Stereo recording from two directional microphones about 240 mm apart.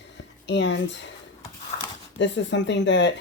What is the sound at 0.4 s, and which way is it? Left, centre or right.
Speech, left.